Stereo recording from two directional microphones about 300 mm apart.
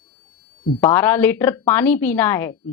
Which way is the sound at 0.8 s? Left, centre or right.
Centre.